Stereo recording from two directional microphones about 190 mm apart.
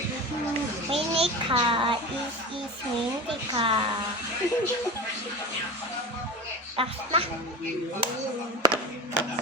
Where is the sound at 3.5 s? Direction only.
25° right (ahead or behind).